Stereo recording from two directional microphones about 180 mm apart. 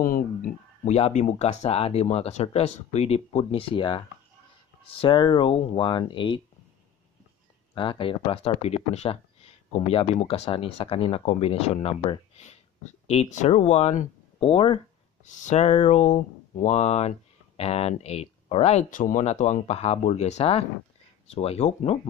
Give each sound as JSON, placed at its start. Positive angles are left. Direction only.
{"t": 0.0, "sound": "a sound", "side_deg": 50}
{"t": 0.9, "sound": "speech", "side_deg": 40}
{"t": 5.0, "sound": "speech", "side_deg": 25}
{"t": 7.7, "sound": "speech", "side_deg": 30}
{"t": 15.2, "sound": "speech", "side_deg": 45}